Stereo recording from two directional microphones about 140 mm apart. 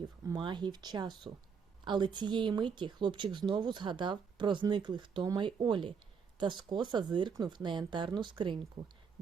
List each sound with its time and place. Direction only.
0.3 s speech: 30° right (ahead or behind)